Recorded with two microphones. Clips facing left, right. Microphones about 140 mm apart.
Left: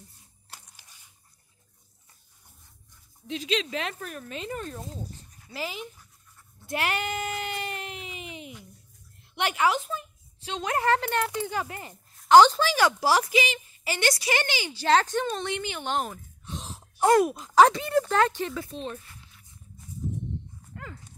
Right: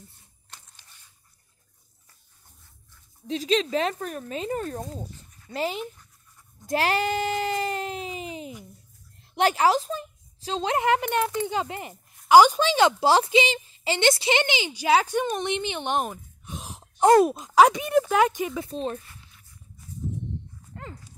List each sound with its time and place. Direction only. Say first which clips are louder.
0.5 s a sound: left 1 dB; 10° left (ahead or behind)
3.3 s speech: right 5 dB; 40° right (ahead or behind)
6.6 s a sound: right 5 dB; 35° right (ahead or behind)
9.3 s a woman's voice: right 4 dB; 35° right (ahead or behind); by 11.9 s 20° right (ahead or behind)
11.9 s speech: right 1 dB; 10° right (ahead or behind)
18.7 s speech: right 5 dB; 35° right (ahead or behind)
20.7 s dog: right 2 dB; 30° right (ahead or behind)